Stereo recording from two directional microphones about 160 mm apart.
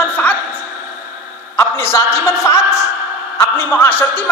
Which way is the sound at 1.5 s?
15° left (ahead or behind).